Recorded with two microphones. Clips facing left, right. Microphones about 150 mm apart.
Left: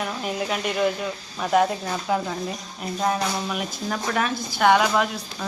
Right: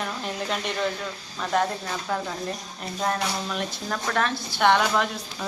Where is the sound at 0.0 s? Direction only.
5° left (ahead or behind).